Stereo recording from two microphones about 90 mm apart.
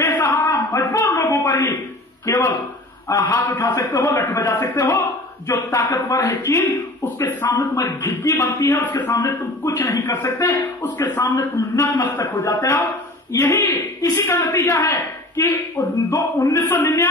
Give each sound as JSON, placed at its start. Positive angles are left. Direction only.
{"t": 0.0, "sound": "a sound", "side_deg": 30}
{"t": 2.2, "sound": "a man's voice", "side_deg": 35}
{"t": 8.1, "sound": "a man's voice", "side_deg": 30}
{"t": 8.7, "sound": "speech", "side_deg": 25}
{"t": 9.1, "sound": "a man's voice", "side_deg": 40}
{"t": 10.1, "sound": "a man's voice", "side_deg": 25}